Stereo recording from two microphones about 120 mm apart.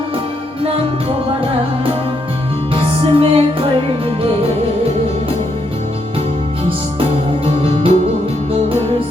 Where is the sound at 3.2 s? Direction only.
50° right (ahead or behind).